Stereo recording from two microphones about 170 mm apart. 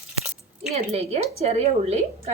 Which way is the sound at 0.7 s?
40° right (ahead or behind).